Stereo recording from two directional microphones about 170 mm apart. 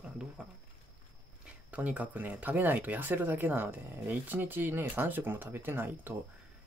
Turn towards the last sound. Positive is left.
turn(degrees=-10)  # may be behind; listen again after turning